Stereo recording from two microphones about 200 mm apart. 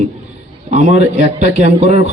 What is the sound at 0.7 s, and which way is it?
A man's voice, 35° right (ahead or behind).